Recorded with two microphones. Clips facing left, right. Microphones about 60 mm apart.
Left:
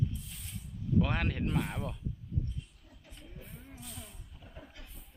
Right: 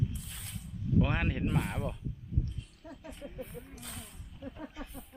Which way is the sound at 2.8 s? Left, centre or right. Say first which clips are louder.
Right 12 dB; right.